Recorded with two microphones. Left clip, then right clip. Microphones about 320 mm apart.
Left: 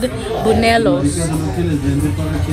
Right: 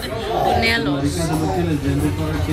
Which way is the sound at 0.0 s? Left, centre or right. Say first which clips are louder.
Left 2 dB; centre.